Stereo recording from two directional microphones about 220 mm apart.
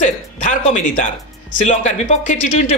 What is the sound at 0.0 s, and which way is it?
Speech, 35° left (ahead or behind).